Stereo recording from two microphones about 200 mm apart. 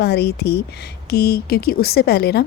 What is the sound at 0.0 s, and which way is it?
A woman's voice, 55° left (ahead or behind).